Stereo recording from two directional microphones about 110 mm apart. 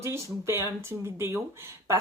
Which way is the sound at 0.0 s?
25° right (ahead or behind).